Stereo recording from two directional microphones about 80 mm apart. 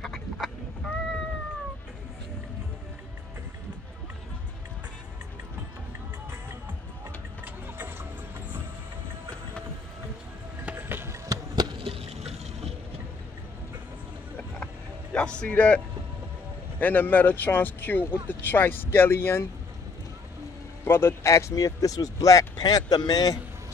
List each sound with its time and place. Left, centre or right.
0.0 s duck: centre
7.4 s music: right
10.8 s music: right
11.2 s a sound: right
15.1 s a man's voice: centre
16.8 s speech: left
20.8 s speech: left